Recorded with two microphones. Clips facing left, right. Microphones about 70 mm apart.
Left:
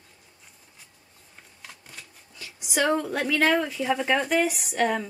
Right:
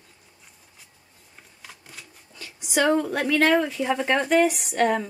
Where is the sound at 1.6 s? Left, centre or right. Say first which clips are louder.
Right 1 dB; centre.